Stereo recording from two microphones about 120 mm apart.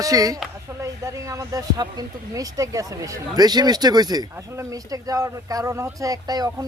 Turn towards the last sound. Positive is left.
turn(degrees=-30)  # may be behind; listen again after turning